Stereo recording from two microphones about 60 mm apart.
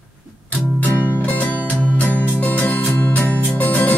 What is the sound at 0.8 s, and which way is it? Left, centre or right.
Music, left.